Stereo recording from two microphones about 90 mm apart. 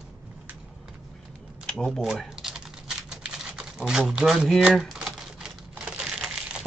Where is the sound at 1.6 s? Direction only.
5° left (ahead or behind).